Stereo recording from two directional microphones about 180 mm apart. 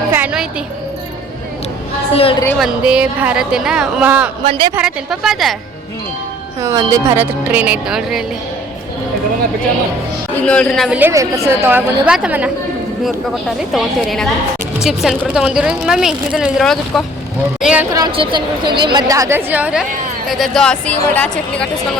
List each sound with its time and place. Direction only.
0.1 s music: 10° right (ahead or behind)
2.6 s a woman's voice: 5° right (ahead or behind)
4.4 s a woman's voice: 30° right (ahead or behind)
4.7 s a woman's voice: 5° right (ahead or behind)
6.6 s speech: 15° right (ahead or behind)
10.4 s a woman's voice: 5° left (ahead or behind)
11.1 s speech: 15° right (ahead or behind)
13.6 s a woman's voice: centre (ahead or behind)
17.9 s a woman's voice: 25° right (ahead or behind); by 21.7 s 5° left (ahead or behind)